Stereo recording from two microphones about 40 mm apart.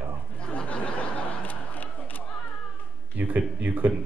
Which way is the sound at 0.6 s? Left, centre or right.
Left.